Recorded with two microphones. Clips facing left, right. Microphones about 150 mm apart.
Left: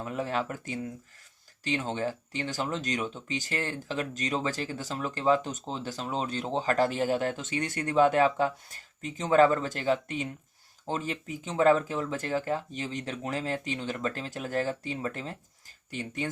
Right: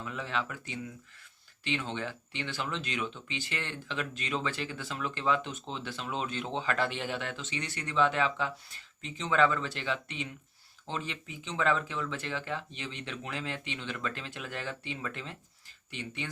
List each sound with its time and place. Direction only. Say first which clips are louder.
0.0 s speech: left 5 dB; 45° left (ahead or behind)